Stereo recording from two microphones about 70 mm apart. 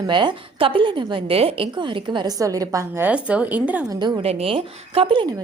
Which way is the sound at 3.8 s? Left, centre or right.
Right.